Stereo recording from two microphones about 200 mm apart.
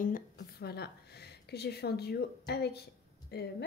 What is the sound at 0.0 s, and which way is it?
A woman's voice, 40° left (ahead or behind).